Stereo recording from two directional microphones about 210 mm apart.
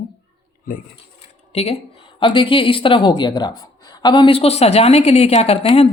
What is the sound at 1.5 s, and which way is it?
Speech, 30° left (ahead or behind).